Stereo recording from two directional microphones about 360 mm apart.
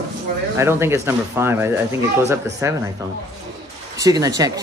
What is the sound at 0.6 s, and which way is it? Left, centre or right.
Speech, centre.